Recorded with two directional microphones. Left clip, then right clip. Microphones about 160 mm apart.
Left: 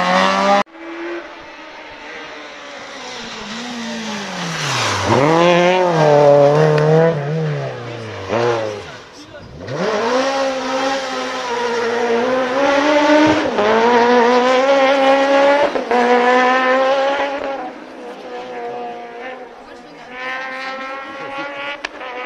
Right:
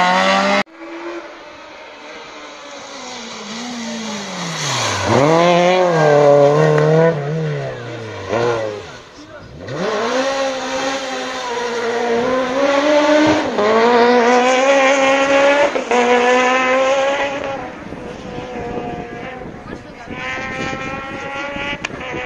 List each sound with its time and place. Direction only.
0.0 s vehicle: centre (ahead or behind)
3.4 s vehicle: 15° left (ahead or behind)
9.7 s vehicle: centre (ahead or behind)
15.0 s vehicle: 15° left (ahead or behind)
20.2 s vehicle: 15° left (ahead or behind)